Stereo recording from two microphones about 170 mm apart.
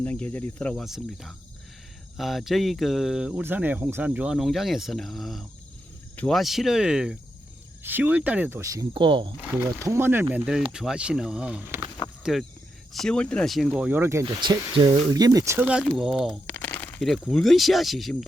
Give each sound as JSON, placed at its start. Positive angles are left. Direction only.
{"t": 0.0, "sound": "speech", "side_deg": 10}
{"t": 8.9, "sound": "speech", "side_deg": -30}
{"t": 9.4, "sound": "speech", "side_deg": -10}
{"t": 12.2, "sound": "speech", "side_deg": 0}
{"t": 14.3, "sound": "speech", "side_deg": -25}
{"t": 15.5, "sound": "speech", "side_deg": -5}